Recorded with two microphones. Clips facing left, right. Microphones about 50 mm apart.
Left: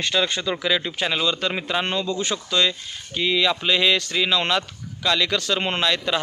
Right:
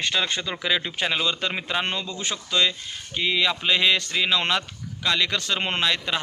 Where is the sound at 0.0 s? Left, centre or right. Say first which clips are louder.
Left 3 dB; centre.